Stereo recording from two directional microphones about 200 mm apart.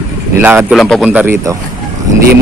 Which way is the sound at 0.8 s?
Centre (ahead or behind).